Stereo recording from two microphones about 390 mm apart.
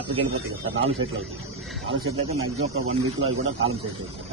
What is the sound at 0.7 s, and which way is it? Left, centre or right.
Speech, right.